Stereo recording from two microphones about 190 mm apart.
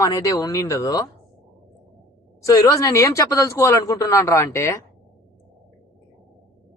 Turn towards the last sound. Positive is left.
turn(degrees=15)  # may be behind; listen again after turning